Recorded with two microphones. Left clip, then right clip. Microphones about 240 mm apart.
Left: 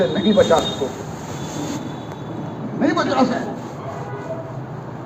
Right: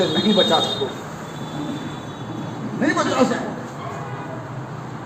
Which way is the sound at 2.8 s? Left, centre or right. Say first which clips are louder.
Left 1 dB; right.